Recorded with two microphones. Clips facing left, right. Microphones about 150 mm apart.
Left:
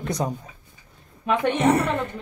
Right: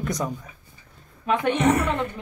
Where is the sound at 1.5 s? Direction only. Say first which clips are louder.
Left 1 dB; 30° left (ahead or behind).